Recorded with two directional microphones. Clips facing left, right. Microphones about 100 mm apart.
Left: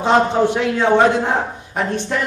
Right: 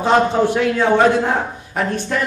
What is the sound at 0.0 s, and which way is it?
A man's voice, 20° left (ahead or behind).